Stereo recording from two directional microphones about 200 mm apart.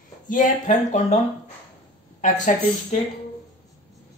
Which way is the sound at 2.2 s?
40° left (ahead or behind).